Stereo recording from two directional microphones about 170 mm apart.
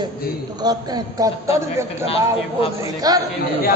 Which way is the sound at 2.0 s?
35° left (ahead or behind).